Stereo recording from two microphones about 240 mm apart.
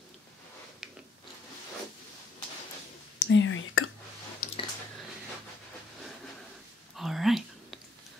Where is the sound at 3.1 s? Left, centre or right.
Left.